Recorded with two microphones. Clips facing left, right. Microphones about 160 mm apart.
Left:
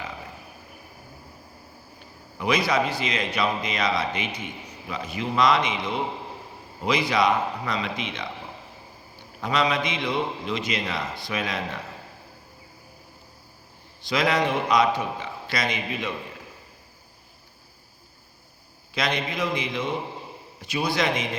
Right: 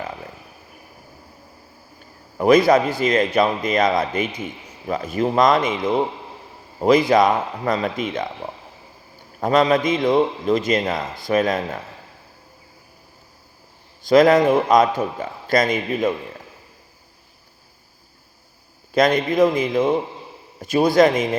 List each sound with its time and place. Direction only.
2.0 s a man's voice: 45° right (ahead or behind)
9.4 s a man's voice: 45° right (ahead or behind)
14.1 s a man's voice: 50° right (ahead or behind)
18.9 s a man's voice: 50° right (ahead or behind)